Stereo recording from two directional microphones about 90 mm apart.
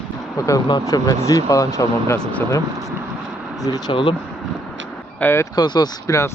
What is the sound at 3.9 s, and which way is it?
Speech, 70° left (ahead or behind).